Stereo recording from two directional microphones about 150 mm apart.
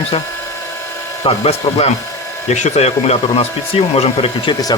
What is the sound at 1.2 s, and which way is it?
Speech, 45° left (ahead or behind).